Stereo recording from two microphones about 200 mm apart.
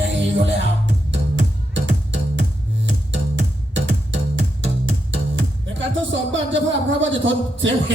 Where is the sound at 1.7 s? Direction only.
65° right (ahead or behind).